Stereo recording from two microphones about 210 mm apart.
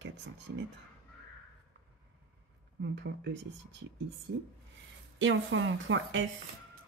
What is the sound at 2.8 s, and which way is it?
Speech, 55° right (ahead or behind).